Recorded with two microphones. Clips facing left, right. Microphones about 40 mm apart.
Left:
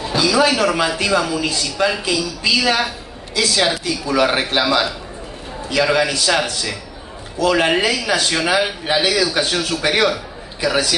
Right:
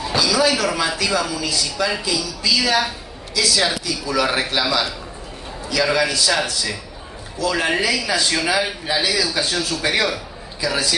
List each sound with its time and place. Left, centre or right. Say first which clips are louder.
0.1 s a man's voice: left 3 dB; left